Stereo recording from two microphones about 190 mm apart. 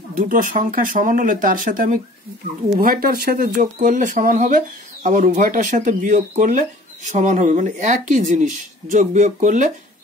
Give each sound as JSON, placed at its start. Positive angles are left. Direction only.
{"t": 0.3, "sound": "speech", "side_deg": -45}